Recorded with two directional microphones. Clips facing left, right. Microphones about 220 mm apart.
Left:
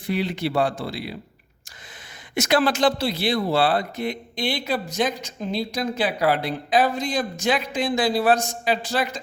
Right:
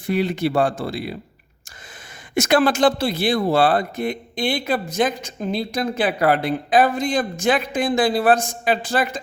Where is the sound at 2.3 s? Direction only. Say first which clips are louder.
Right 3 dB; 50° right (ahead or behind).